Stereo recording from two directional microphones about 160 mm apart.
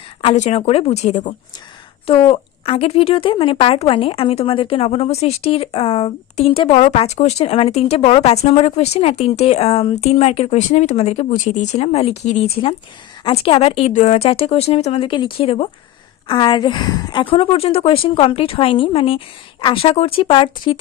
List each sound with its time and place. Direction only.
0.3 s speech: 45° left (ahead or behind)